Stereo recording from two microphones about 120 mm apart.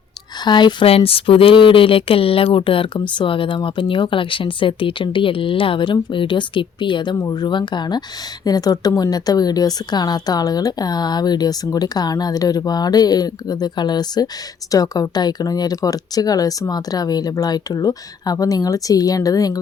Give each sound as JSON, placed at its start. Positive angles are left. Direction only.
{"t": 0.4, "sound": "speech", "side_deg": 40}
{"t": 0.9, "sound": "speech", "side_deg": 50}